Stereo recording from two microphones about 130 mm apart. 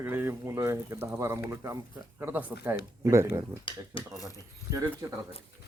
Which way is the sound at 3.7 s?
40° left (ahead or behind).